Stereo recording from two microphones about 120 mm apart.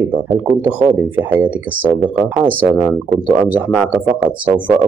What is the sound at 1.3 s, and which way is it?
Speech, 15° right (ahead or behind).